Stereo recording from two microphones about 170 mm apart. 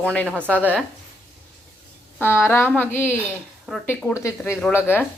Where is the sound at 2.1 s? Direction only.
15° left (ahead or behind).